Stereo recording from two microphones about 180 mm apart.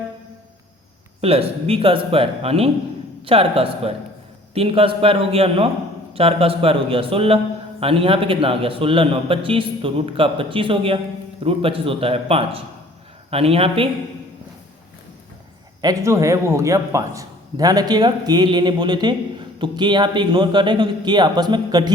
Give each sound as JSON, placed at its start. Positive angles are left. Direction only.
{"t": 1.2, "sound": "a man's voice", "side_deg": -35}
{"t": 15.8, "sound": "a man's voice", "side_deg": -20}